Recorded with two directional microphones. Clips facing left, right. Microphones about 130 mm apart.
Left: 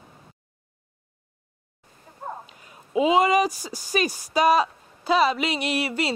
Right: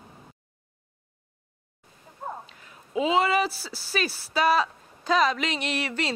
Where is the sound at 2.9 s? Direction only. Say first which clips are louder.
Left 4 dB; 10° left (ahead or behind).